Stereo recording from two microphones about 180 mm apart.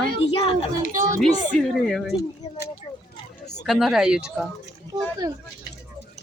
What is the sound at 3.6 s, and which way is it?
Speech, centre (ahead or behind).